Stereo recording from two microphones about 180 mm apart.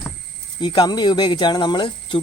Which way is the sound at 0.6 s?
25° left (ahead or behind).